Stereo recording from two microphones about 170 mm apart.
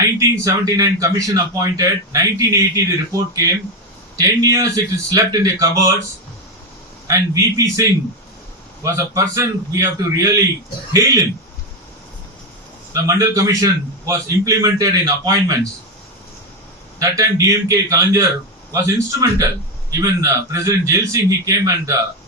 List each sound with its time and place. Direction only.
0.2 s a man's voice: 20° right (ahead or behind)
7.1 s a man's voice: 20° right (ahead or behind)
12.9 s a man's voice: 20° right (ahead or behind)
17.0 s a man's voice: 20° right (ahead or behind)